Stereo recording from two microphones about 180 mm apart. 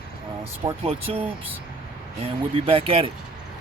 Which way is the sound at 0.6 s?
20° right (ahead or behind).